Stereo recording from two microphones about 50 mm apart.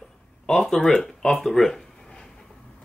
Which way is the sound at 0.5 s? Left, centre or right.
Centre.